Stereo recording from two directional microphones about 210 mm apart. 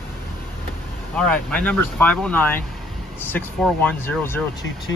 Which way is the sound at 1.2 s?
5° left (ahead or behind).